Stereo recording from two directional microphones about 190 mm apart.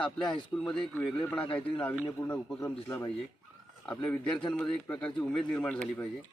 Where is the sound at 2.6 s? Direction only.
15° left (ahead or behind).